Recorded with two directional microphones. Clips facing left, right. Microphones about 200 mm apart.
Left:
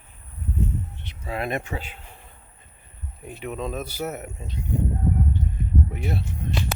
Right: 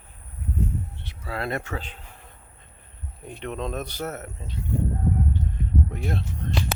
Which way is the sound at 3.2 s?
5° left (ahead or behind).